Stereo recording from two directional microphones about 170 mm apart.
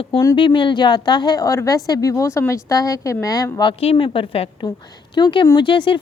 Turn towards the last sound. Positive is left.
turn(degrees=30)  # may be behind; listen again after turning